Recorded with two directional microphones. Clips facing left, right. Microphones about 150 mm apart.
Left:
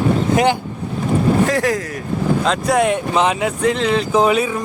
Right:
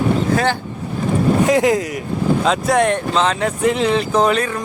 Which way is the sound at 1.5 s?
20° right (ahead or behind).